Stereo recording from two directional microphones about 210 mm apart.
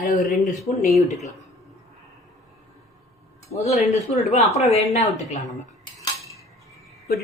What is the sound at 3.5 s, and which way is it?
Speech, 30° left (ahead or behind).